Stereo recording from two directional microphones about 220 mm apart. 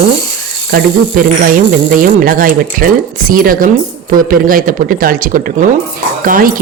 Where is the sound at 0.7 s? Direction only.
40° right (ahead or behind).